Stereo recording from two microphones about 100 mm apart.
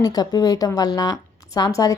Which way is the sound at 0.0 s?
40° left (ahead or behind).